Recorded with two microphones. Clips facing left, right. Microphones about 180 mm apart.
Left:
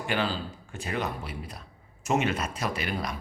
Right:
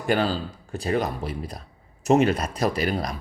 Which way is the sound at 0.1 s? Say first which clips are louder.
Right 7 dB; 40° right (ahead or behind).